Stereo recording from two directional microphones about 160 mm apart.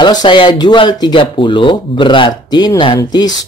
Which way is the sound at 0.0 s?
30° left (ahead or behind).